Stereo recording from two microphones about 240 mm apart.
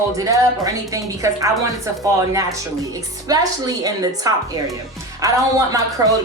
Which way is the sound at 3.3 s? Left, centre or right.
Centre.